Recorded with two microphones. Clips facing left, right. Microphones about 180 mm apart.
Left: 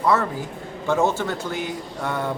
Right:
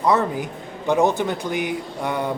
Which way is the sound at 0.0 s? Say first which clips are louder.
Right 2 dB; 15° right (ahead or behind).